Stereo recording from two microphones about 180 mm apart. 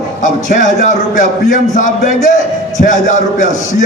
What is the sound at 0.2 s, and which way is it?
A man's voice, 45° left (ahead or behind).